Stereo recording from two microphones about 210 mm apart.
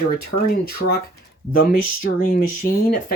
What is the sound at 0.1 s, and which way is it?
Speech, 45° left (ahead or behind).